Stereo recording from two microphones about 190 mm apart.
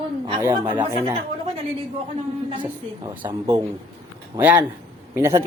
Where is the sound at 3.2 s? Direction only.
20° right (ahead or behind).